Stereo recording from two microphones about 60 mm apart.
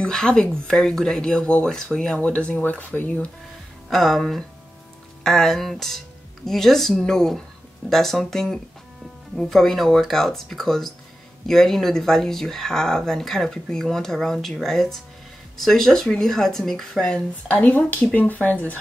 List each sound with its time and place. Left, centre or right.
0.0 s speech: centre
3.9 s speech: centre
17.1 s speech: centre
17.6 s speech: left